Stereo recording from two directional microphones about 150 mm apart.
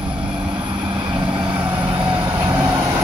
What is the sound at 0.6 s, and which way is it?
Vehicle, 30° right (ahead or behind).